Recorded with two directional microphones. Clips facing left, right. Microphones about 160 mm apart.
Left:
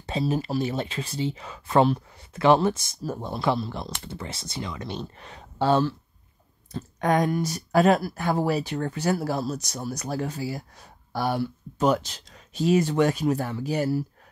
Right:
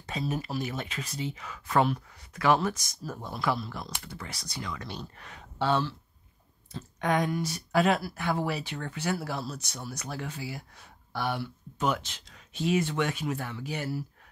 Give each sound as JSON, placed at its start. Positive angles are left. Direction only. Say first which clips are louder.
{"t": 0.0, "sound": "speech", "louder": "left 6 dB", "side_deg": 30}
{"t": 5.6, "sound": "speech", "louder": "left 6 dB", "side_deg": 40}